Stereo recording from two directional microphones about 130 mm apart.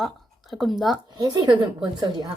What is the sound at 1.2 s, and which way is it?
A woman's voice, 35° right (ahead or behind).